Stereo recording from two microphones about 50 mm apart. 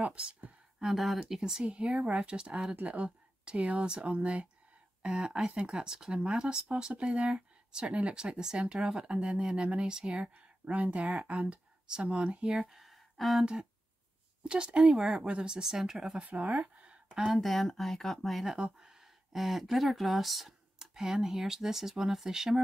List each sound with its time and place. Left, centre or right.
0.0 s a sound: right
0.9 s speech: centre
2.7 s speech: right
10.3 s speech: right
12.4 s speech: centre
14.4 s speech: centre
16.3 s speech: right
17.1 s speech: centre
18.8 s speech: centre